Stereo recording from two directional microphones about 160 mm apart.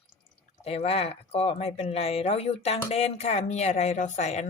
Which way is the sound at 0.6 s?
40° left (ahead or behind).